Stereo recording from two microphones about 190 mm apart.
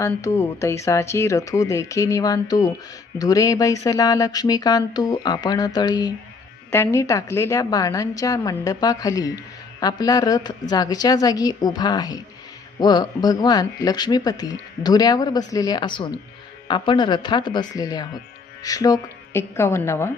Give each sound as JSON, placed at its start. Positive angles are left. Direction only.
{"t": 0.0, "sound": "a woman's voice", "side_deg": 15}